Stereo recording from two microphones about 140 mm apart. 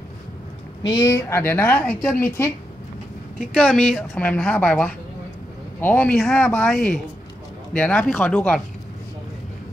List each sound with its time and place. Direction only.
0.8 s a woman's voice: 25° left (ahead or behind)
3.5 s a woman's voice: 5° left (ahead or behind)